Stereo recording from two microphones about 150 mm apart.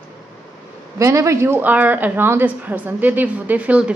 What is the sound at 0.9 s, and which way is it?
A woman's voice, 20° right (ahead or behind).